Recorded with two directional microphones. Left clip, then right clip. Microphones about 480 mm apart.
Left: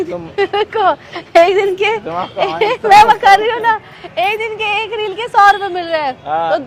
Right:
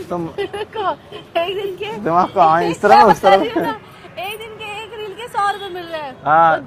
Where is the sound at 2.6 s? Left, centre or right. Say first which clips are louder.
Left 8 dB; left.